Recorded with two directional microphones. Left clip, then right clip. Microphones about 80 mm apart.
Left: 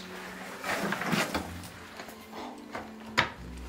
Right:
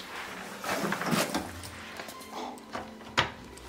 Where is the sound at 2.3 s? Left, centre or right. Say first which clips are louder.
Right 2 dB; centre.